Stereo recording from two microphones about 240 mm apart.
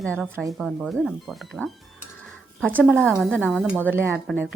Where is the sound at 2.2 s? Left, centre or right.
Centre.